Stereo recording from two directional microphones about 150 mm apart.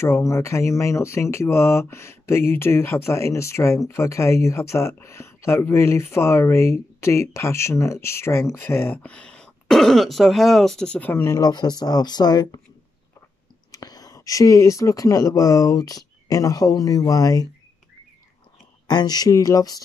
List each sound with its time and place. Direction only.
0.0 s speech: 20° left (ahead or behind)
13.7 s speech: 25° left (ahead or behind)
18.9 s speech: 25° left (ahead or behind)